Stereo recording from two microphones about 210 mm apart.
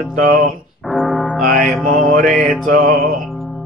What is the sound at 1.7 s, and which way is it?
Mantra, centre (ahead or behind).